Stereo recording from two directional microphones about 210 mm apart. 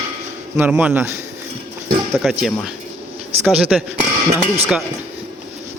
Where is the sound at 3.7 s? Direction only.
Centre (ahead or behind).